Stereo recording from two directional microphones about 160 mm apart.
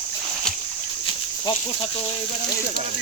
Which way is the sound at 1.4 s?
35° left (ahead or behind).